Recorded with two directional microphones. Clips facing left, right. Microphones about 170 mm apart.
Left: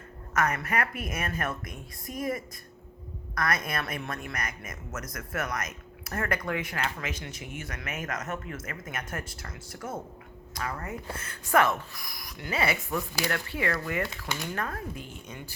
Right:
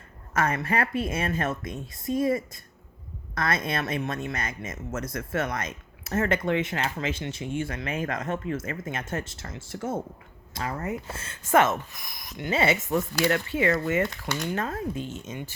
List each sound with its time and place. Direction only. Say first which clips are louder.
0.3 s speech: right 2 dB; 30° right (ahead or behind)